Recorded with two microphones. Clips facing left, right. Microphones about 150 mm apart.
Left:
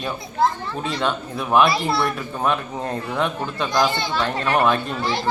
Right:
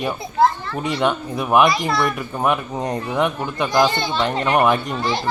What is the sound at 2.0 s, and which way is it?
A man's voice, 15° right (ahead or behind).